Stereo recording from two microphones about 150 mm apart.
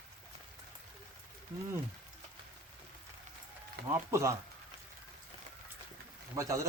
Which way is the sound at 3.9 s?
20° right (ahead or behind).